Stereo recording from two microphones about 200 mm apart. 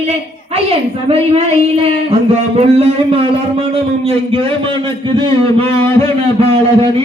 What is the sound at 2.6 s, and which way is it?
Speech, 30° right (ahead or behind).